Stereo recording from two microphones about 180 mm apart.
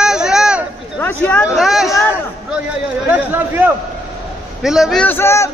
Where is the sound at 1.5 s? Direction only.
Centre (ahead or behind).